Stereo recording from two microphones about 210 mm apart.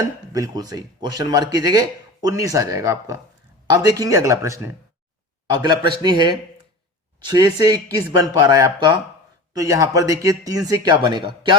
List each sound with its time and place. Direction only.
0.0 s speech: 15° right (ahead or behind)